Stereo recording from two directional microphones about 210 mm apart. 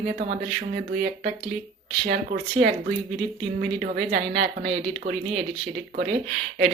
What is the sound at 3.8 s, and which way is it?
Speech, 50° right (ahead or behind).